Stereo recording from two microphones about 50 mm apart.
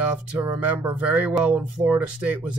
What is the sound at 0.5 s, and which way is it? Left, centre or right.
Speech, right.